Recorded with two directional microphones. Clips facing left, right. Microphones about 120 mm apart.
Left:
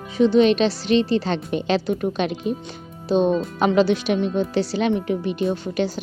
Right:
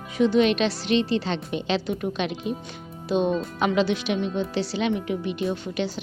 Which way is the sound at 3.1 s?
35° left (ahead or behind).